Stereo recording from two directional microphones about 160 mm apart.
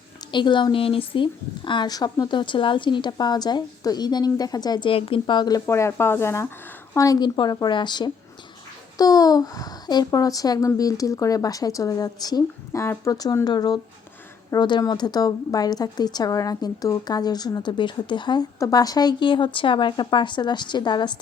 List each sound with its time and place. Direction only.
0.3 s a woman's voice: 30° left (ahead or behind)